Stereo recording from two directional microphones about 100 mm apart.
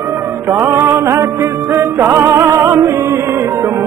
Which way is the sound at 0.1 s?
25° right (ahead or behind).